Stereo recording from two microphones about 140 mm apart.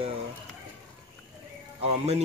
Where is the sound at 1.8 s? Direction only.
45° right (ahead or behind).